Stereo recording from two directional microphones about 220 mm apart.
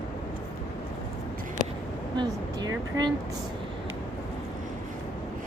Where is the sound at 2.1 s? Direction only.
20° right (ahead or behind).